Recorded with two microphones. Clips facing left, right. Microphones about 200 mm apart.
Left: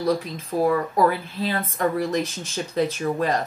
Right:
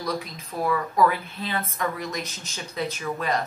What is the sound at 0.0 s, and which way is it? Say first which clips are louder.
Speech: left 7 dB; 35° left (ahead or behind).